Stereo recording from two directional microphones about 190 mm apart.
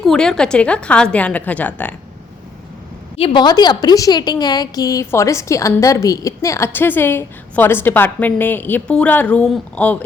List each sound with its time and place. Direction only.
0.0 s a woman's voice: centre (ahead or behind)
3.2 s a woman's voice: 25° left (ahead or behind); by 10.0 s 5° left (ahead or behind)